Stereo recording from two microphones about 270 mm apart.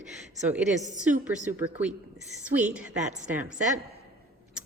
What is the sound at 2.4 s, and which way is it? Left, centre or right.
Speech, centre.